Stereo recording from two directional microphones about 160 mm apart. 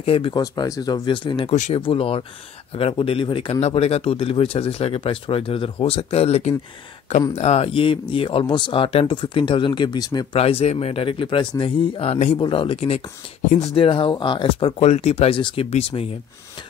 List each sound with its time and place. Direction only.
0.0 s speech: 35° left (ahead or behind)
0.4 s speech: 20° left (ahead or behind)
1.5 s speech: 50° left (ahead or behind)
1.8 s speech: 35° left (ahead or behind)
10.3 s speech: 35° left (ahead or behind)